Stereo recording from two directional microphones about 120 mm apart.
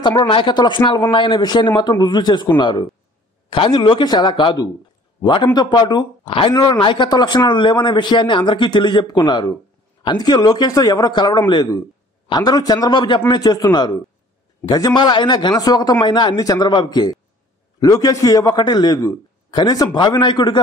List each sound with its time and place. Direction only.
0.0 s a man's voice: 35° left (ahead or behind)